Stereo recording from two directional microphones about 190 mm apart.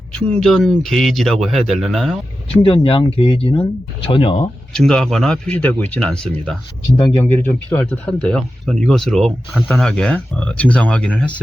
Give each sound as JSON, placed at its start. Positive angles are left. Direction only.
{"t": 0.1, "sound": "speech", "side_deg": 5}
{"t": 2.6, "sound": "speech", "side_deg": 30}
{"t": 4.7, "sound": "speech", "side_deg": 5}